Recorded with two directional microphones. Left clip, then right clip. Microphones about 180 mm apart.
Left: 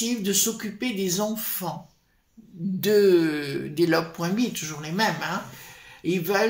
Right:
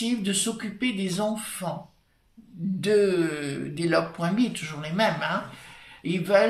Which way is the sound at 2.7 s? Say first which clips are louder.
Left 3 dB; 55° left (ahead or behind).